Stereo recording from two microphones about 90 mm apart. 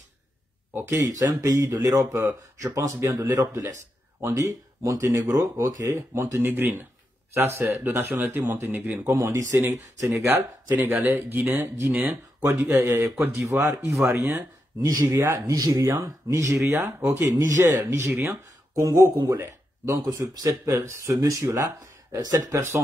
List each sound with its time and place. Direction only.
0.7 s speech: 30° right (ahead or behind)
1.0 s speech: 45° right (ahead or behind)
2.1 s speech: 30° right (ahead or behind)
4.3 s speech: 35° right (ahead or behind); by 12.4 s 20° right (ahead or behind)
12.7 s speech: 30° right (ahead or behind)